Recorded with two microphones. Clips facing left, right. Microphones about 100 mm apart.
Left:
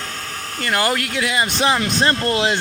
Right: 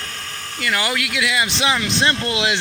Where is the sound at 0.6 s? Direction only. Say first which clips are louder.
Left 2 dB; 40° left (ahead or behind).